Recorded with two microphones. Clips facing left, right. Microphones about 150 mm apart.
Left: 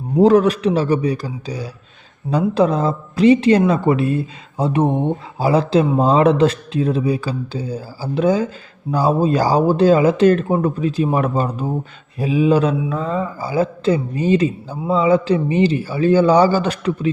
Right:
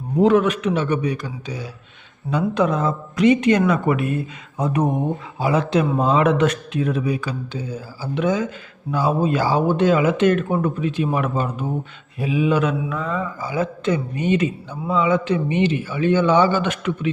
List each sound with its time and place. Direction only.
0.2 s a man's voice: 35° left (ahead or behind)